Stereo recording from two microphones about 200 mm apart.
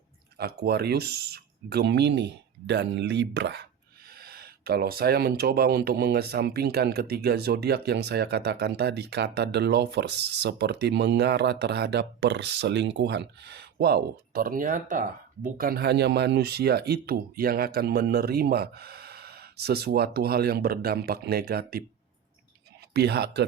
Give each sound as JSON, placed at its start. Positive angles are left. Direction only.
{"t": 0.3, "sound": "speech", "side_deg": -50}
{"t": 23.0, "sound": "speech", "side_deg": -55}